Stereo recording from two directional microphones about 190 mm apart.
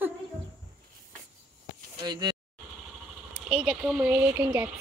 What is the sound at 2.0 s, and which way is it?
Speech, 20° right (ahead or behind).